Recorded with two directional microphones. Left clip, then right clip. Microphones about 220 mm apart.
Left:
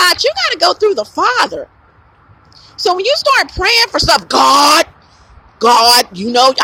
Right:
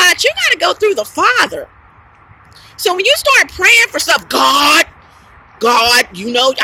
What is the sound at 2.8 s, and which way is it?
Speech, 15° left (ahead or behind).